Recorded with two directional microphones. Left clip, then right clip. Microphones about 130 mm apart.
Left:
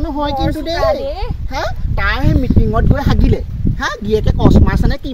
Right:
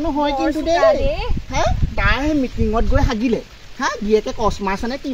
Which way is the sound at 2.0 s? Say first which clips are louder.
Left 1 dB; centre (ahead or behind).